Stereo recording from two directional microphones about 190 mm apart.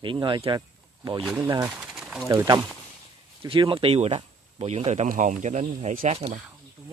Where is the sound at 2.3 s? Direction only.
20° right (ahead or behind); by 6.4 s 35° right (ahead or behind).